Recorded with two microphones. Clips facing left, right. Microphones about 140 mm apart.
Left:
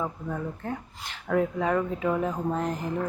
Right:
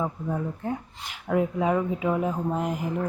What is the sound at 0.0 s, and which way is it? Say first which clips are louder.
Speech: right 3 dB; 15° right (ahead or behind).